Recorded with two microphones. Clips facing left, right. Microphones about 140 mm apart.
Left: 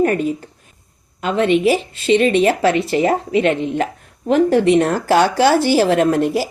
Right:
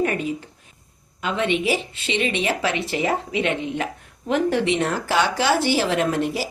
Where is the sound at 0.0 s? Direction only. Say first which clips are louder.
Left 6 dB; 45° left (ahead or behind).